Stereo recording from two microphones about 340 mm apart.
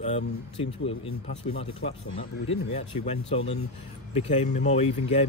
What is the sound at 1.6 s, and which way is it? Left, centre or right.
Speech, centre.